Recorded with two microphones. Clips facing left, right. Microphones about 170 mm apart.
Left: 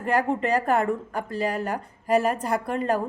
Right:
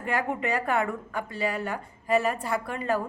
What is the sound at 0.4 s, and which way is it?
A woman's voice, 40° left (ahead or behind).